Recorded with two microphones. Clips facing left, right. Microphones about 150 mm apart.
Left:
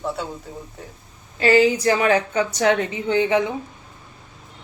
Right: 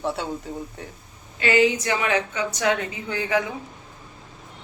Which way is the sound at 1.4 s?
35° left (ahead or behind).